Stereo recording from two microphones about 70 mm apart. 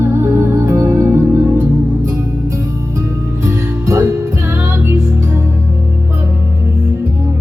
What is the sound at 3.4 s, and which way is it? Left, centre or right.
Music, right.